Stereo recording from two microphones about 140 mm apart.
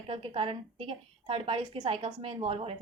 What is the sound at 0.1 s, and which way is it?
A woman's voice, 40° right (ahead or behind).